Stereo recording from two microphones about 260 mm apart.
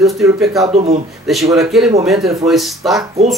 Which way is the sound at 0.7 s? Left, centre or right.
Right.